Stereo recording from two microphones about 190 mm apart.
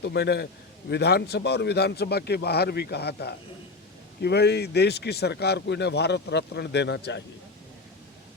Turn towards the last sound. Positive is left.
turn(degrees=65)  # may be behind; listen again after turning